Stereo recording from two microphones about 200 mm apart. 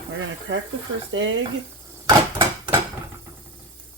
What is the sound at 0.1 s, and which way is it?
Speech, 70° right (ahead or behind).